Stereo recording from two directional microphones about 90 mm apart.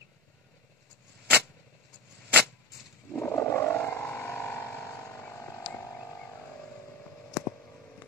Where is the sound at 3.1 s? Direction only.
25° left (ahead or behind).